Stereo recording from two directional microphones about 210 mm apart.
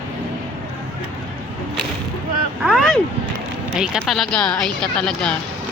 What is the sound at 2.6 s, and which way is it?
Vehicle, centre (ahead or behind).